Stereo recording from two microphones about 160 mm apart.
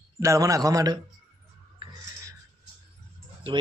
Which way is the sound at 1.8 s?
30° right (ahead or behind).